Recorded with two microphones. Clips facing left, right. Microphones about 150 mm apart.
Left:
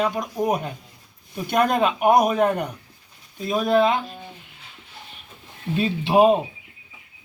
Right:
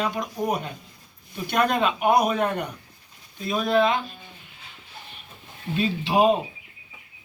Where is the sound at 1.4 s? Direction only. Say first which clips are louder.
Left 3 dB; 45° left (ahead or behind).